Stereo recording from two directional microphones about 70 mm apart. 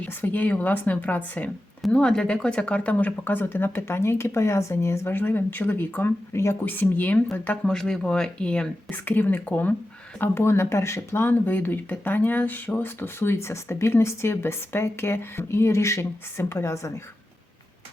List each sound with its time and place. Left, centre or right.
0.0 s speech: left
1.9 s speech: centre; by 6.6 s left
6.7 s speech: left
7.6 s speech: centre
8.9 s speech: left
10.2 s speech: left